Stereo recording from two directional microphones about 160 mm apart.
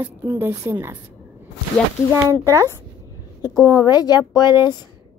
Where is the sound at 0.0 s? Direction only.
10° right (ahead or behind).